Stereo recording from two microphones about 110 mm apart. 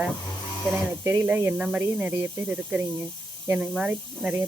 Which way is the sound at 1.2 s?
15° right (ahead or behind).